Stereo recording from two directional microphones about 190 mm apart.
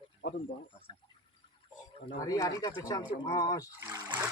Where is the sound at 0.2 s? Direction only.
50° left (ahead or behind).